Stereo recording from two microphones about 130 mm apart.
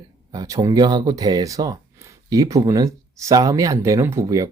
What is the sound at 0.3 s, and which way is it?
Speech, 25° right (ahead or behind).